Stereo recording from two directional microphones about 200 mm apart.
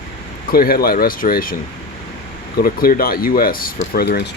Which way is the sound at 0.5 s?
50° left (ahead or behind).